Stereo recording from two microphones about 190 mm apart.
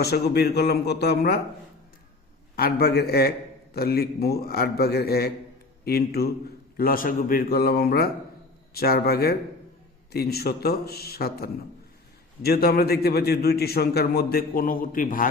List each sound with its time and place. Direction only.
0.0 s a man's voice: 60° left (ahead or behind)
2.6 s a man's voice: 55° left (ahead or behind)